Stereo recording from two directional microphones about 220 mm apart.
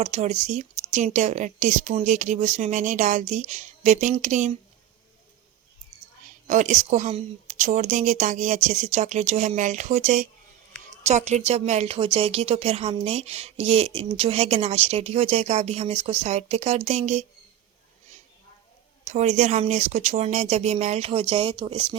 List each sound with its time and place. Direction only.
0.0 s speech: 30° right (ahead or behind)
6.5 s speech: 35° right (ahead or behind)
19.0 s speech: 30° right (ahead or behind)